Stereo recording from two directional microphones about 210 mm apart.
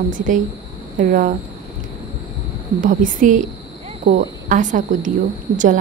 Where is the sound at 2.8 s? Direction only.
40° right (ahead or behind).